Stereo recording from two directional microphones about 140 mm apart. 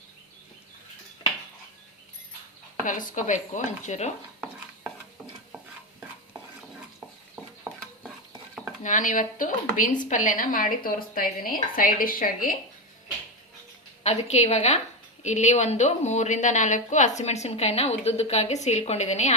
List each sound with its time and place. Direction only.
2.8 s a woman's voice: 70° left (ahead or behind)
8.8 s speech: 65° left (ahead or behind); by 12.5 s 90° left
14.0 s a woman's voice: 50° left (ahead or behind)